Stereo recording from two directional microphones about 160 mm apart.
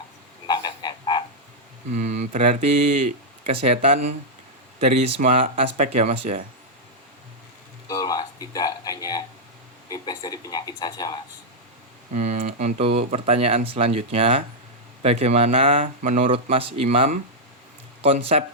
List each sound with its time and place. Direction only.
0.4 s frog: 25° left (ahead or behind)
1.9 s speech: 45° right (ahead or behind)
3.5 s speech: 40° right (ahead or behind)
5.2 s speech: 55° right (ahead or behind)
7.9 s music: 25° left (ahead or behind)
9.9 s speech: 25° left (ahead or behind)
12.1 s speech: 45° right (ahead or behind)
16.3 s speech: 35° right (ahead or behind)
18.3 s speech: 45° right (ahead or behind)